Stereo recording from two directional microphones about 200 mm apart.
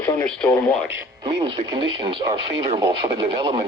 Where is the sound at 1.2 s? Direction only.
25° right (ahead or behind).